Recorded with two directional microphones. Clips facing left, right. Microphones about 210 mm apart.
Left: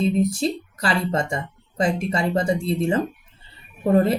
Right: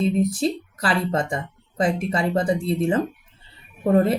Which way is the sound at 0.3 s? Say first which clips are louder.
Right 1 dB; centre (ahead or behind).